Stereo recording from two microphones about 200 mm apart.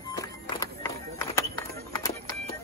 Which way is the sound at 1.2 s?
15° left (ahead or behind).